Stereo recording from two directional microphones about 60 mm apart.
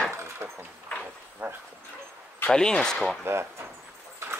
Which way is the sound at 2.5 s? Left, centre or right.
Centre.